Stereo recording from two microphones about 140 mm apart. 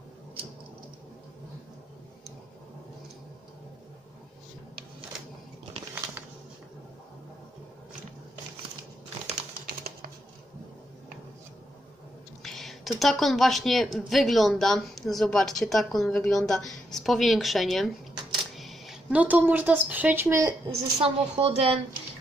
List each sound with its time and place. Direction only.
12.4 s a woman's voice: centre (ahead or behind); by 20.5 s 20° right (ahead or behind)
20.6 s a woman's voice: 40° right (ahead or behind)